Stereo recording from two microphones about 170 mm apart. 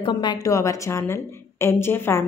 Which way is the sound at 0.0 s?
25° left (ahead or behind).